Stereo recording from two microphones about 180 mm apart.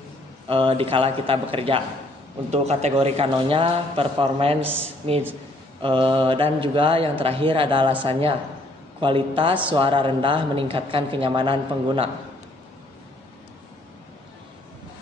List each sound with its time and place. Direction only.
0.5 s a man's voice: 30° right (ahead or behind)
4.6 s speech: 10° right (ahead or behind)
5.8 s a woman's voice: 30° right (ahead or behind)